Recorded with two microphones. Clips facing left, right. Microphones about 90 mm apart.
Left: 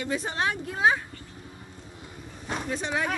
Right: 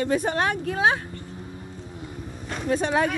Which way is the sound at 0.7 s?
90° right.